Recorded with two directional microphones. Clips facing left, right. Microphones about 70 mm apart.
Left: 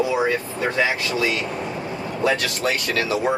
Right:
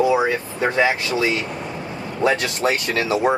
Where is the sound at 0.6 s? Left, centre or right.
Right.